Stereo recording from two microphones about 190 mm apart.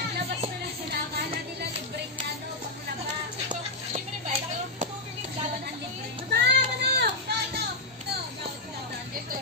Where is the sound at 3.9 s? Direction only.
35° right (ahead or behind).